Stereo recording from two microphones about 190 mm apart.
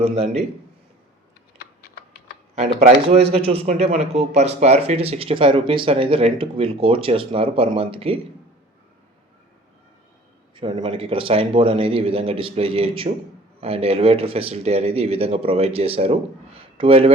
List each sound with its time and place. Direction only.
0.0 s speech: 35° right (ahead or behind)
2.6 s speech: 35° right (ahead or behind)
10.5 s speech: 25° right (ahead or behind)